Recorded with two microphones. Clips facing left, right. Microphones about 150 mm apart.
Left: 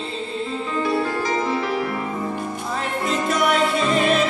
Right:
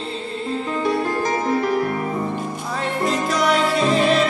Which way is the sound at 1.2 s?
45° right (ahead or behind).